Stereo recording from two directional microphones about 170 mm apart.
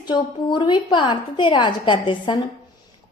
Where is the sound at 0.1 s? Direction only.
25° left (ahead or behind).